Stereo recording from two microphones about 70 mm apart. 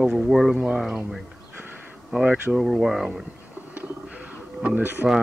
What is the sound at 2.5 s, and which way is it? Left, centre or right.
Speech, centre.